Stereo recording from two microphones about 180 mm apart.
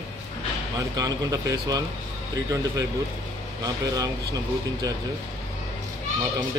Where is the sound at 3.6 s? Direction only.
20° right (ahead or behind).